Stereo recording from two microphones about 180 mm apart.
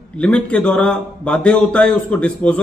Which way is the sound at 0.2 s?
5° left (ahead or behind).